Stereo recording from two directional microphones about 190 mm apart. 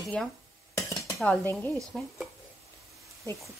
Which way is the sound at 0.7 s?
15° left (ahead or behind).